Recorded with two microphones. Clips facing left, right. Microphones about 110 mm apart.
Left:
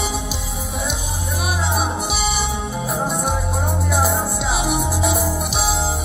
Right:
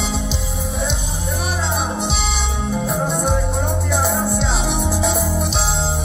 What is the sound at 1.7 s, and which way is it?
Music, 5° left (ahead or behind).